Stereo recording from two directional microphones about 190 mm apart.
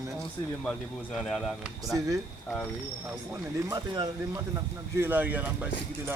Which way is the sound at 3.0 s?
15° right (ahead or behind).